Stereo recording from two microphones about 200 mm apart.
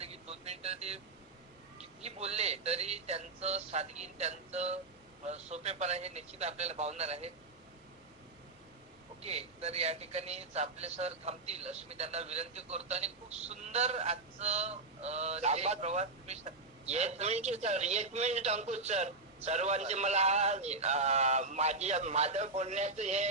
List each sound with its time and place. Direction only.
0.0 s vehicle: 30° right (ahead or behind)
1.8 s speech: 30° right (ahead or behind)
9.2 s speech: 30° right (ahead or behind)